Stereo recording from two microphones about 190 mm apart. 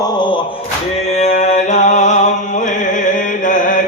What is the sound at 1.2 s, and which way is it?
Music, 35° left (ahead or behind).